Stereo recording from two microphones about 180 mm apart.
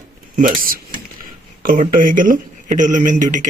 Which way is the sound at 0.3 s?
50° right (ahead or behind).